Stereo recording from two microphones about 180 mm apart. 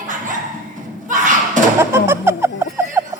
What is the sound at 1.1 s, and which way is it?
Slam, 45° right (ahead or behind).